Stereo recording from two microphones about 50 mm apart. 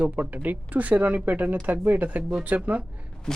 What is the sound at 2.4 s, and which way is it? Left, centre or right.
Speech, right.